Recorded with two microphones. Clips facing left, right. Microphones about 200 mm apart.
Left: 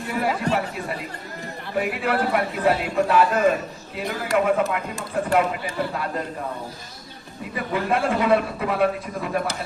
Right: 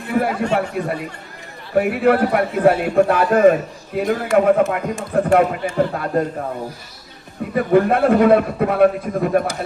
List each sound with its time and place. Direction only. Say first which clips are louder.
0.0 s chatter: right 7 dB; 55° right (ahead or behind)
0.8 s a man's voice: right 7 dB; 55° right (ahead or behind)
7.5 s a man's voice: right 9 dB; 50° right (ahead or behind)